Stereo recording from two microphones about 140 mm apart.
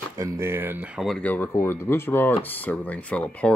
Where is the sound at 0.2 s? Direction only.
20° right (ahead or behind).